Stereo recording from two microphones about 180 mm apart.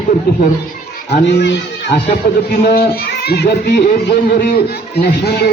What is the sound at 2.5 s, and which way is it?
Speech, 45° left (ahead or behind).